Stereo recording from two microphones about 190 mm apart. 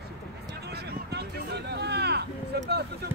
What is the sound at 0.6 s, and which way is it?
Speech, 60° right (ahead or behind).